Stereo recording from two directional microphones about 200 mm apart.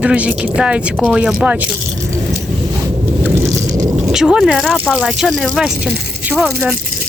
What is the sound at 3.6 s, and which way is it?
Boat, 15° right (ahead or behind).